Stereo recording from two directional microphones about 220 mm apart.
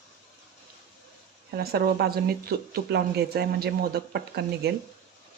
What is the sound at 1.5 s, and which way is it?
Speech, 45° right (ahead or behind).